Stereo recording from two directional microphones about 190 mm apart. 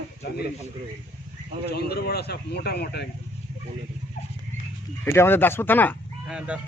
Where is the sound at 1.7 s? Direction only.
55° left (ahead or behind).